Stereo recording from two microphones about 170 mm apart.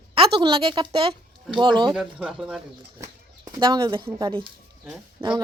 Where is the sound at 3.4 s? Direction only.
30° right (ahead or behind).